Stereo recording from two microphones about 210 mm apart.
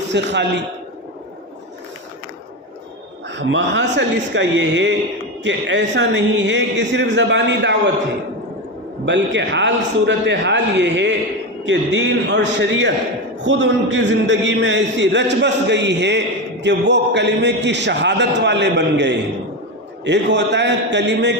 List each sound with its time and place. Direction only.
0.1 s a man's voice: 55° right (ahead or behind)
3.2 s a man's voice: 55° right (ahead or behind)
9.0 s a man's voice: 55° right (ahead or behind)